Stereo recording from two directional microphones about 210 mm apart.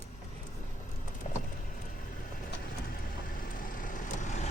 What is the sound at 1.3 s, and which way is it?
Vehicle, 35° left (ahead or behind).